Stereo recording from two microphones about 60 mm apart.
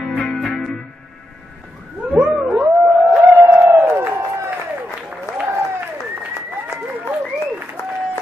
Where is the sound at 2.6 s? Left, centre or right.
Right.